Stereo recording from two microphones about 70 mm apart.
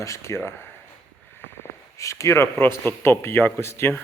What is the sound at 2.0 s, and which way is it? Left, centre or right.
Speech, left.